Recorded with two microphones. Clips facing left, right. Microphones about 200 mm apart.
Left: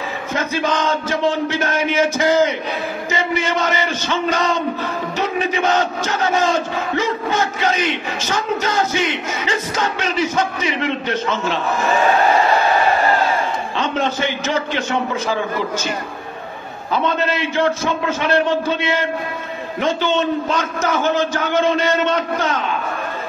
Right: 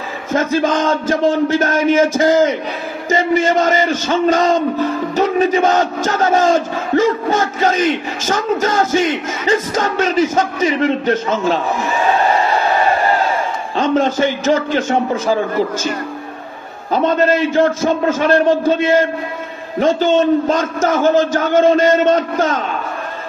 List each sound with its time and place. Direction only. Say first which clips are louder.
0.3 s speech: right 6 dB; 45° right (ahead or behind)
13.7 s speech: right 7 dB; 45° right (ahead or behind)
16.9 s speech: right 6 dB; 45° right (ahead or behind)